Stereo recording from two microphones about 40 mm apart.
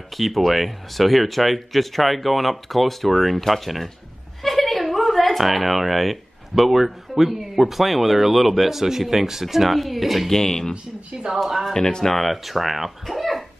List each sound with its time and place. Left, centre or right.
0.1 s a woman's voice: centre
10.3 s speech: centre